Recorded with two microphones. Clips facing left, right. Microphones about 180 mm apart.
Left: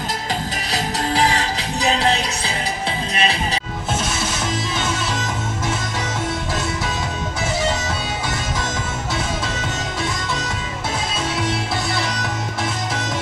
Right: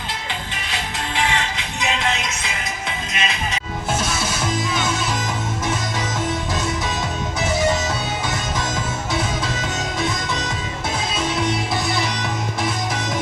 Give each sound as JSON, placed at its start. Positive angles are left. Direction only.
{"t": 0.7, "sound": "music", "side_deg": 35}